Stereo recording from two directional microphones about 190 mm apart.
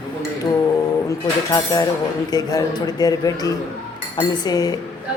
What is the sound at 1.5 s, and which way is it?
A woman's voice, 20° left (ahead or behind).